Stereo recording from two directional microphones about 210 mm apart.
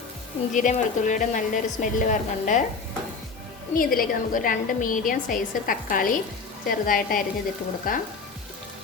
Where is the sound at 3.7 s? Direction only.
45° left (ahead or behind).